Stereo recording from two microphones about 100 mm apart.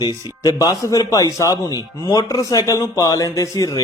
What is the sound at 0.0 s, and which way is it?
Speech, 40° left (ahead or behind).